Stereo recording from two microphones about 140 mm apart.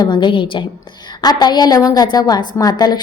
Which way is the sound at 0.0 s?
35° left (ahead or behind).